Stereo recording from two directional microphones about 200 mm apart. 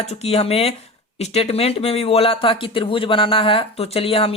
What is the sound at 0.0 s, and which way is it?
Speech, 30° left (ahead or behind).